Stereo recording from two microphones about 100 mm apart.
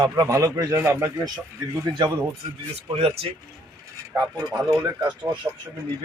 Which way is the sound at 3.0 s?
65° right (ahead or behind).